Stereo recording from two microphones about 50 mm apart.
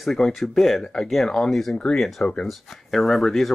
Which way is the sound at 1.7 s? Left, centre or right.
Centre.